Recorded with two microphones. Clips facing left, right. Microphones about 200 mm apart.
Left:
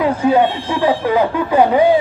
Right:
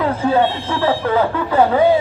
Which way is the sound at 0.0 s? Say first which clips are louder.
Left 2 dB; 15° left (ahead or behind).